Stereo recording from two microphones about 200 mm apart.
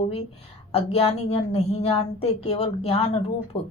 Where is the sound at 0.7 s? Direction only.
30° left (ahead or behind).